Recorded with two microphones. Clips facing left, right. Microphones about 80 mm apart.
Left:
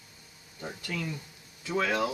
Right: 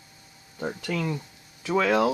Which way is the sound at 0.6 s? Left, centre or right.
Right.